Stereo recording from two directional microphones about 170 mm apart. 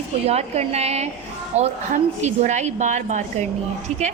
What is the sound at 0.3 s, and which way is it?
A woman's voice, 40° right (ahead or behind).